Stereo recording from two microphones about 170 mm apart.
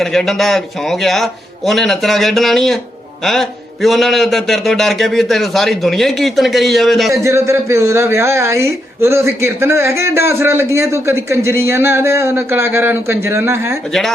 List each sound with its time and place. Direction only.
0.0 s a man's voice: centre (ahead or behind)
7.1 s a man's voice: 15° right (ahead or behind)